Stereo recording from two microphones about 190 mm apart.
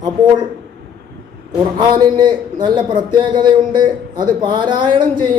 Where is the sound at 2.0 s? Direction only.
20° right (ahead or behind).